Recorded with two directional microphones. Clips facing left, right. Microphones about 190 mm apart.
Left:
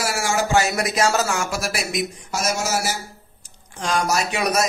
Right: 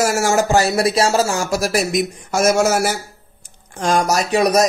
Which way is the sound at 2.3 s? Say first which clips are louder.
Right 9 dB; 55° right (ahead or behind).